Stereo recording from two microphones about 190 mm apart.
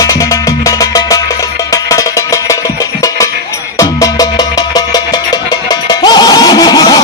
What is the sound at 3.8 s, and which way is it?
Music, 20° left (ahead or behind).